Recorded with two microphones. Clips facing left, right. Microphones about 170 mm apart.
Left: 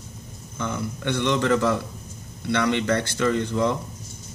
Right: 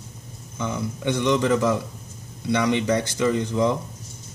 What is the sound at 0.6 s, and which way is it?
Speech, 15° right (ahead or behind).